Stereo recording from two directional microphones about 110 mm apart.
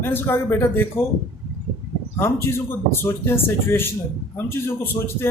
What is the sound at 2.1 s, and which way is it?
Speech, 25° left (ahead or behind).